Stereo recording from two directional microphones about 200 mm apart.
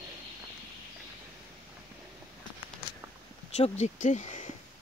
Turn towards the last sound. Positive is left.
turn(degrees=35)  # may be behind; listen again after turning